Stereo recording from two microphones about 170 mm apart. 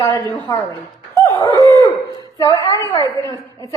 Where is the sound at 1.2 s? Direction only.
20° left (ahead or behind).